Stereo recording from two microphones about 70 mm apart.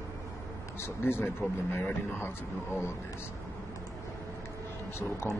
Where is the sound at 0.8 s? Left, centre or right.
Left.